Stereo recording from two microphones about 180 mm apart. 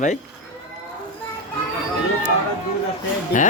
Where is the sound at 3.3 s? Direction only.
45° left (ahead or behind).